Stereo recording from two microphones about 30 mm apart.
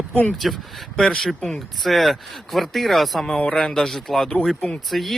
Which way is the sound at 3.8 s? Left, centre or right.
Centre.